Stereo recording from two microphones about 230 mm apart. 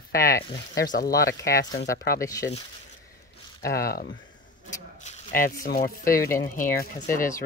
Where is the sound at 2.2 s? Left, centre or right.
Centre.